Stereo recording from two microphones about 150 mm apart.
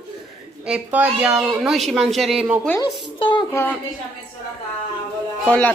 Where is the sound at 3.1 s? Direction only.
35° left (ahead or behind).